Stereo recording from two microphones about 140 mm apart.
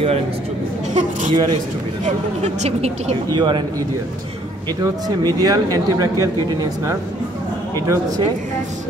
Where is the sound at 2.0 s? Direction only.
55° right (ahead or behind).